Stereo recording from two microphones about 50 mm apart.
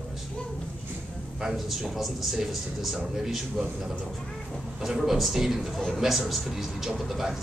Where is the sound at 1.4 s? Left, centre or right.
Centre.